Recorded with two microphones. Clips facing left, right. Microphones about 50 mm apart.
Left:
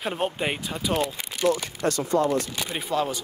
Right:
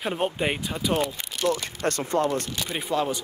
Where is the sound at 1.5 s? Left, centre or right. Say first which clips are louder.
Left 1 dB; right.